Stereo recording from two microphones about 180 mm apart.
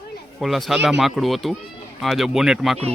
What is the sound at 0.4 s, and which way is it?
Speech, centre (ahead or behind).